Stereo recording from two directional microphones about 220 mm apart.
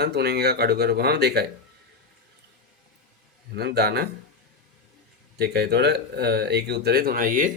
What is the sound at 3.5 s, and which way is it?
Speech, 50° right (ahead or behind).